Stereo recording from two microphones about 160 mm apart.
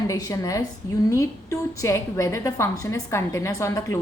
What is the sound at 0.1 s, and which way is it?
A woman's voice, 20° left (ahead or behind).